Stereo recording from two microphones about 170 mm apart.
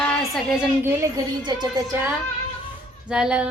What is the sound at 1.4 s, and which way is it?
Speech, 25° right (ahead or behind).